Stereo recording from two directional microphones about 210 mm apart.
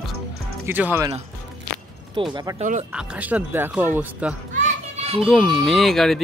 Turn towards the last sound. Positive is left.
turn(degrees=0)  # may be behind; listen again after turning